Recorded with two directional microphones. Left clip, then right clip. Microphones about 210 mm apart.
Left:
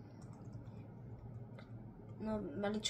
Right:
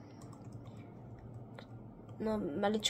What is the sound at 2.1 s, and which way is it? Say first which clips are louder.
Speech: right 6 dB; 45° right (ahead or behind).